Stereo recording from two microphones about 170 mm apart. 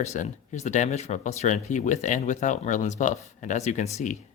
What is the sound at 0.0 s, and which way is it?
Speech, 40° left (ahead or behind).